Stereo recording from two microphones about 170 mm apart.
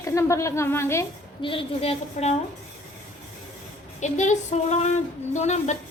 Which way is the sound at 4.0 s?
45° left (ahead or behind).